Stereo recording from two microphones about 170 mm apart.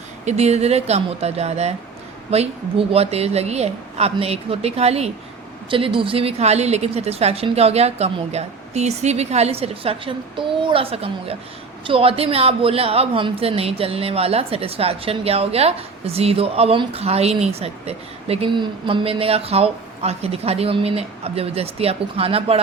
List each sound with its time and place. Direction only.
0.3 s speech: 40° right (ahead or behind)